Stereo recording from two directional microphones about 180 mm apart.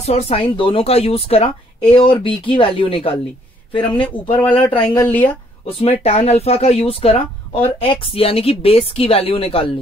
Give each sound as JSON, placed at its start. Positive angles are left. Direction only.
{"t": 0.0, "sound": "speech", "side_deg": 35}
{"t": 4.8, "sound": "speech", "side_deg": 10}
{"t": 5.7, "sound": "speech", "side_deg": 35}